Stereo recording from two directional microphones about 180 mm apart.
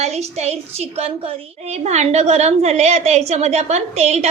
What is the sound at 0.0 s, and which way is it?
A woman's voice, 35° right (ahead or behind).